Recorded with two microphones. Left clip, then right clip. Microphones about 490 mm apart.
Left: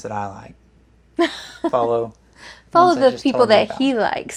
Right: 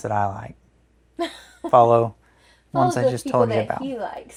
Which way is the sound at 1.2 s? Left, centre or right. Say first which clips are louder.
Left 8 dB; left.